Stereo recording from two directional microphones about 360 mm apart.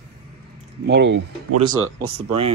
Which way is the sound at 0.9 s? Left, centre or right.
Right.